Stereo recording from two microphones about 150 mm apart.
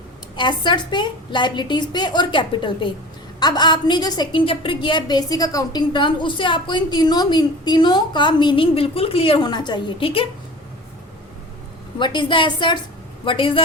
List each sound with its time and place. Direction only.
0.3 s a woman's voice: 30° left (ahead or behind)
11.9 s a woman's voice: 30° left (ahead or behind)